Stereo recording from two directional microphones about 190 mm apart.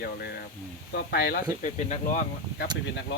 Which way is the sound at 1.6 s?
40° left (ahead or behind).